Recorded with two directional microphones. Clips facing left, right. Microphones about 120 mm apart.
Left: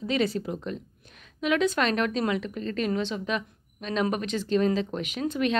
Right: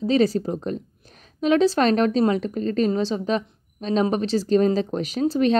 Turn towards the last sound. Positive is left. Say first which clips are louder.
# right 7 dB
turn(degrees=-35)  # may be behind; listen again after turning